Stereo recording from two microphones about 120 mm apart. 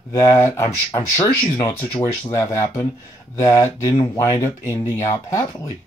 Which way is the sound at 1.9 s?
45° left (ahead or behind).